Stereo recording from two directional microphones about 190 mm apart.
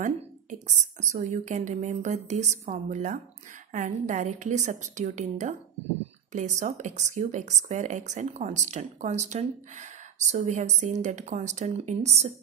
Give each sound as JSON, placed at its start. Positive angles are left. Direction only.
{"t": 0.0, "sound": "speech", "side_deg": -40}